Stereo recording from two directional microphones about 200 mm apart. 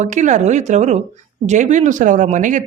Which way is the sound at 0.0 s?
35° right (ahead or behind).